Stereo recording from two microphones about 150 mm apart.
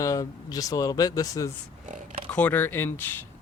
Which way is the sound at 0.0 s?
20° left (ahead or behind).